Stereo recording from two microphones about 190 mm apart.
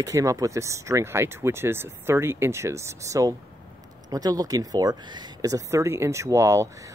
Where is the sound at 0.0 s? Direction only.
15° right (ahead or behind).